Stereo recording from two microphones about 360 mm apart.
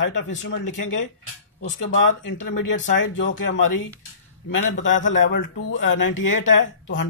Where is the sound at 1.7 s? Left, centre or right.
Left.